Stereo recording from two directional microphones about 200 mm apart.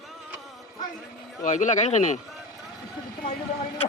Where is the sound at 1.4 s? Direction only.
40° left (ahead or behind).